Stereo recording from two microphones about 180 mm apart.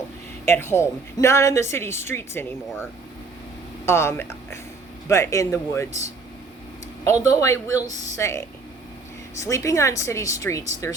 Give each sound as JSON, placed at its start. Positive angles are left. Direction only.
{"t": 0.4, "sound": "a woman's voice", "side_deg": 15}
{"t": 3.8, "sound": "a woman's voice", "side_deg": 15}
{"t": 7.3, "sound": "a woman's voice", "side_deg": 15}